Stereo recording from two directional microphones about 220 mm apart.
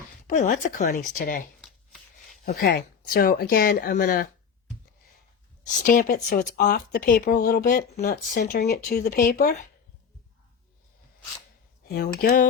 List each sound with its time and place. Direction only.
0.3 s speech: 40° left (ahead or behind)
1.6 s chopping: centre (ahead or behind)
2.4 s speech: 40° left (ahead or behind)
5.6 s speech: 35° left (ahead or behind)
11.9 s speech: 45° left (ahead or behind)